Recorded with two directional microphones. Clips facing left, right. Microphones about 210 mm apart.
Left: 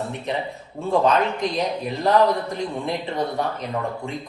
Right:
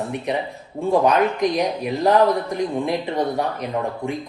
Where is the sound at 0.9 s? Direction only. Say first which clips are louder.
Right 2 dB; 15° right (ahead or behind).